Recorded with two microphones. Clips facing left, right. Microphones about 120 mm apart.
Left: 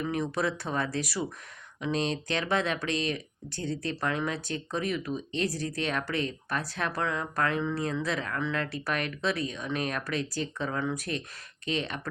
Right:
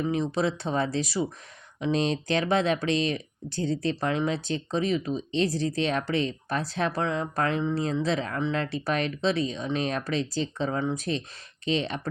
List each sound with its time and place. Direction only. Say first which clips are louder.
0.0 s speech: right 3 dB; 25° right (ahead or behind)